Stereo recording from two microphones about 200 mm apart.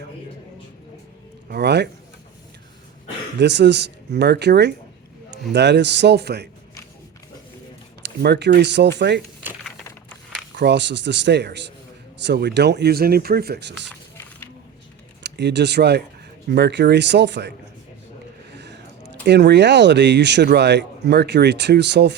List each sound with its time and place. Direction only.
1.5 s speech: 55° right (ahead or behind)
3.3 s speech: 60° right (ahead or behind)
8.0 s speech: 55° right (ahead or behind)
10.5 s speech: 60° right (ahead or behind)
14.2 s a sound: 10° left (ahead or behind)
15.2 s speech: 60° right (ahead or behind)
18.5 s a sound: 60° right (ahead or behind)
19.2 s speech: 55° right (ahead or behind)